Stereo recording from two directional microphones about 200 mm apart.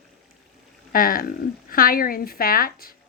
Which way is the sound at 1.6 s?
45° left (ahead or behind).